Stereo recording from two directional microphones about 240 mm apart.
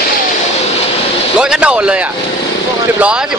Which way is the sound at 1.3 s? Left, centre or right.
Centre.